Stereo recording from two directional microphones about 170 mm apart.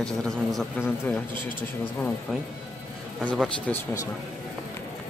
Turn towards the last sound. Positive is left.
turn(degrees=5)  # may be behind; listen again after turning